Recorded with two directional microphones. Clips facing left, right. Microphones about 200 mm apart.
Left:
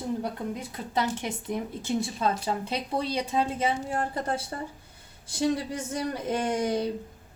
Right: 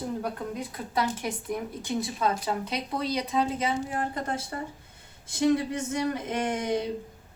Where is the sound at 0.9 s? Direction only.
25° left (ahead or behind).